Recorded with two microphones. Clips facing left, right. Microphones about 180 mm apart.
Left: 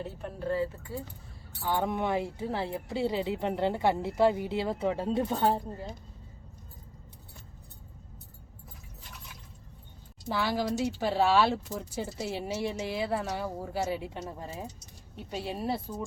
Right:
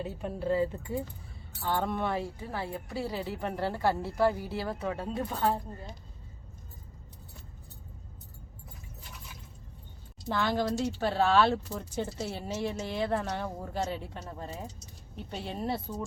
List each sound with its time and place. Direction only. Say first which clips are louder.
0.0 s speech: right 2 dB; 15° right (ahead or behind)
1.6 s speech: left 1 dB; 15° left (ahead or behind)
10.2 s speech: right 1 dB; 5° left (ahead or behind)